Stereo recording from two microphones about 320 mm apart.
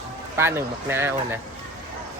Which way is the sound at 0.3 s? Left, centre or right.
Centre.